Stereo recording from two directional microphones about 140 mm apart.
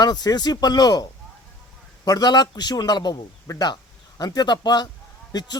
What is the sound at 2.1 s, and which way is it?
Speech, 30° left (ahead or behind).